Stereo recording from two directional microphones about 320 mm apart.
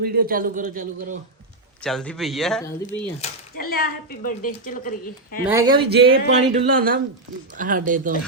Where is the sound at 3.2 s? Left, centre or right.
Left.